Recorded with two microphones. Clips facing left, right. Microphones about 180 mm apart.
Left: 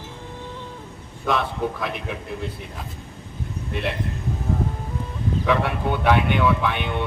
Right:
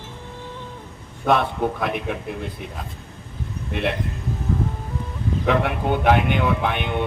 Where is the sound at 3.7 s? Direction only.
55° right (ahead or behind).